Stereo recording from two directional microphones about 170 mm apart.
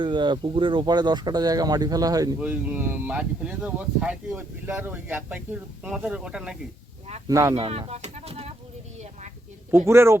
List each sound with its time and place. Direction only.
0.0 s speech: 30° right (ahead or behind)
2.4 s speech: 10° right (ahead or behind)
7.3 s speech: 20° right (ahead or behind)
7.6 s speech: 35° right (ahead or behind)
9.7 s speech: 15° right (ahead or behind)